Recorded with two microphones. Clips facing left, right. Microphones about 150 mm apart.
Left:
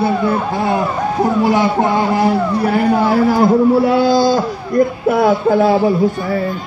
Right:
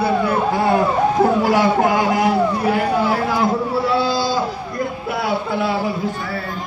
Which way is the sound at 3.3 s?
45° left (ahead or behind).